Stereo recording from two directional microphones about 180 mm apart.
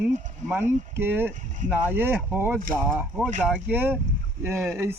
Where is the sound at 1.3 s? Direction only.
45° right (ahead or behind).